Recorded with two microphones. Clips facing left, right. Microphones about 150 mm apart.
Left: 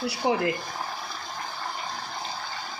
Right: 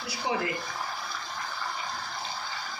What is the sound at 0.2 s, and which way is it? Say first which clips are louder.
Speech: left 5 dB; 60° left (ahead or behind).